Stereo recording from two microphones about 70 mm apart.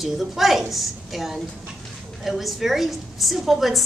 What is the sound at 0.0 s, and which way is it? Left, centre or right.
A woman's voice, centre.